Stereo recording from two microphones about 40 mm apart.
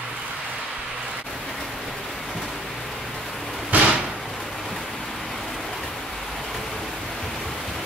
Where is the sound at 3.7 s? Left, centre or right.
Right.